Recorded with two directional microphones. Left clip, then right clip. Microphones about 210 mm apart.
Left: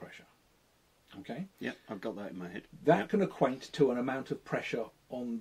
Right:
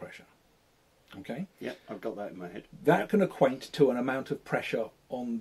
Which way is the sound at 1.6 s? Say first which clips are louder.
Even; 45° left (ahead or behind).